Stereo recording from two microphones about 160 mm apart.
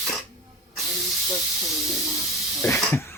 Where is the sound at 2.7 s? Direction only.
15° left (ahead or behind).